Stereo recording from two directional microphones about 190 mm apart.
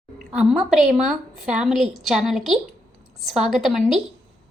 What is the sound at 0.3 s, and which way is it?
A woman's voice, 5° right (ahead or behind).